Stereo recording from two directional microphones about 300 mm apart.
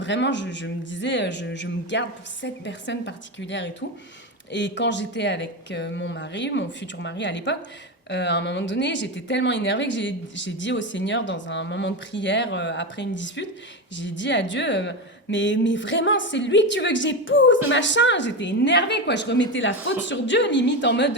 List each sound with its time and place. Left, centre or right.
0.0 s speech: left